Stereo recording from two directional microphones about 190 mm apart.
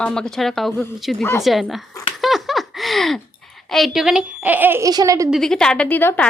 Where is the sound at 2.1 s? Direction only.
Centre (ahead or behind).